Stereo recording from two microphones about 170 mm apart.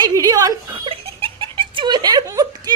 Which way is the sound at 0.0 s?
20° right (ahead or behind).